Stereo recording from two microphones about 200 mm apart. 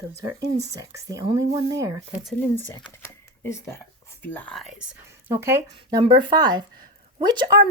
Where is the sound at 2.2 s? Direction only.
10° left (ahead or behind).